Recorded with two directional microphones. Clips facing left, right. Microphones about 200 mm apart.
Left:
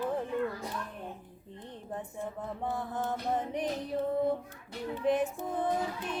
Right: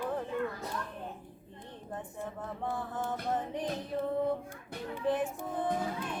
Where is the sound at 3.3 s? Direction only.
20° left (ahead or behind).